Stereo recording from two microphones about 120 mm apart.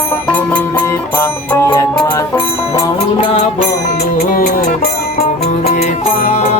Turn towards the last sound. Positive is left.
turn(degrees=65)  # may be behind; listen again after turning